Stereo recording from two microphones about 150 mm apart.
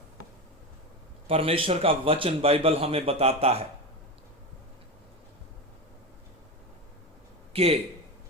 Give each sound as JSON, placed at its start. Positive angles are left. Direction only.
{"t": 1.3, "sound": "a man's voice", "side_deg": -40}
{"t": 7.5, "sound": "a man's voice", "side_deg": -40}